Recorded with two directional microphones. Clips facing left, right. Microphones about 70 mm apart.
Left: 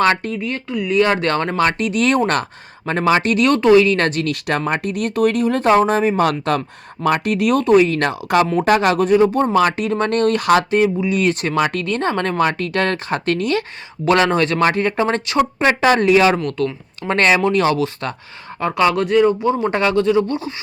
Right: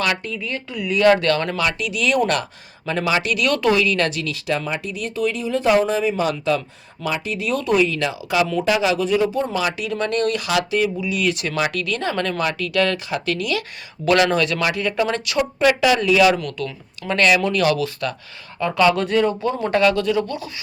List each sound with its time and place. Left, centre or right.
0.9 s speech: left
5.6 s speech: left
7.6 s speech: left